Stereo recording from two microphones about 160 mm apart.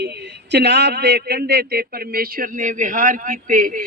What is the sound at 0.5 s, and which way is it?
Speech, 90° right.